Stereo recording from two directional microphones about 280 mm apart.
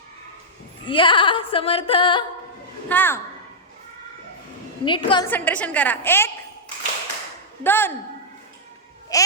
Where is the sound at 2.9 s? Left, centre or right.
Centre.